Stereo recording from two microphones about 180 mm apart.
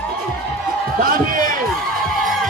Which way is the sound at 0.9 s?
50° right (ahead or behind).